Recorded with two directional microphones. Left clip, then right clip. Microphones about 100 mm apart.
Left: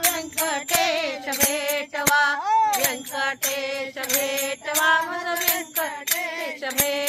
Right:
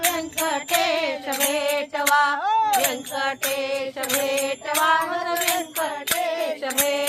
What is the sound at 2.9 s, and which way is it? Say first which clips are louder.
Mantra: right 1 dB; centre (ahead or behind).